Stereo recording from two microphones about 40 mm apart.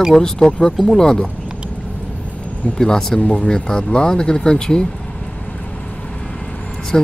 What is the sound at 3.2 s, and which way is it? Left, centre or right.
Speech, left.